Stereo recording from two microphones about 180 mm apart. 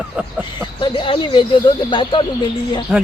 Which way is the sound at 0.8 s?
30° left (ahead or behind).